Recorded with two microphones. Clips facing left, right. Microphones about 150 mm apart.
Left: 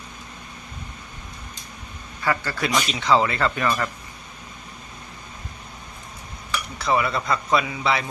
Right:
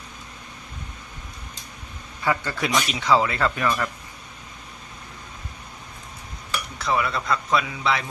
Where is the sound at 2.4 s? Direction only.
15° right (ahead or behind); by 3.8 s centre (ahead or behind).